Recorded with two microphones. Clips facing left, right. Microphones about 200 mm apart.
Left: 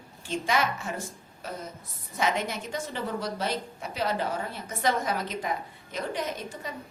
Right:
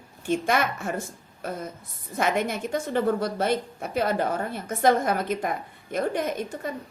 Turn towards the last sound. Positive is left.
turn(degrees=-55)  # may be behind; listen again after turning